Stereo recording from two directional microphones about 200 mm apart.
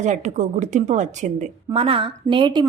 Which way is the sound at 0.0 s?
35° right (ahead or behind).